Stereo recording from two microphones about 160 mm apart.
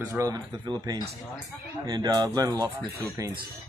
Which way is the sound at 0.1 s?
20° right (ahead or behind).